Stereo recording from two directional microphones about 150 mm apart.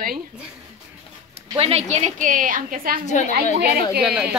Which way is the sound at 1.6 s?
45° right (ahead or behind).